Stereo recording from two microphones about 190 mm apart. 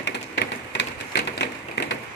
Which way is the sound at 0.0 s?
70° left (ahead or behind).